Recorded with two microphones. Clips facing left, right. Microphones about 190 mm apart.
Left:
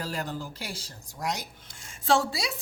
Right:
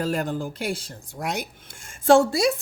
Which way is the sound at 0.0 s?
50° right (ahead or behind).